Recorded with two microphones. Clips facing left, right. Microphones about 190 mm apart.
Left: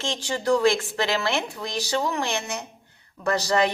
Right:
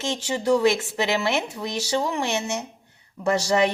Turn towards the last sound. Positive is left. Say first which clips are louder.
# right 2 dB
turn(degrees=-25)  # may be behind; listen again after turning